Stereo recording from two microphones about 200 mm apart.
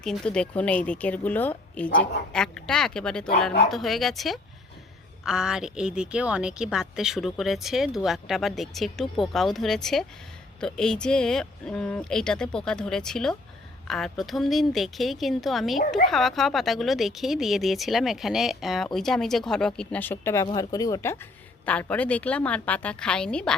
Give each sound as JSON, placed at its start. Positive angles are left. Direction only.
{"t": 0.0, "sound": "speech", "side_deg": 0}